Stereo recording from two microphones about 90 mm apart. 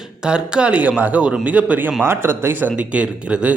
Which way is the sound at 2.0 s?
25° right (ahead or behind).